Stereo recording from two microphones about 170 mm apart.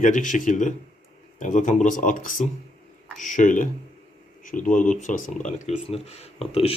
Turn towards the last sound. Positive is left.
turn(degrees=35)  # may be behind; listen again after turning